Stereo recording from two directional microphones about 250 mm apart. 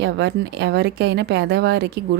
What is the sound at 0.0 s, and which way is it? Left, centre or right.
Speech, right.